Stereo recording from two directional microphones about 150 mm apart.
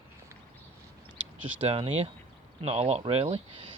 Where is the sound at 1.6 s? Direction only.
45° right (ahead or behind).